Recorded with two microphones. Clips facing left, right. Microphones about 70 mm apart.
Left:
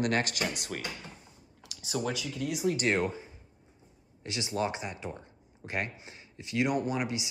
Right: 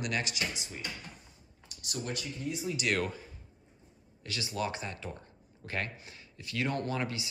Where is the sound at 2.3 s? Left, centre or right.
Left.